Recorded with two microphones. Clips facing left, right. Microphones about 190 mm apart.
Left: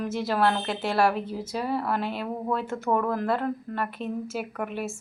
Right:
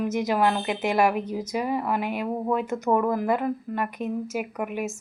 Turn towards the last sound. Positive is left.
turn(degrees=-10)  # may be behind; listen again after turning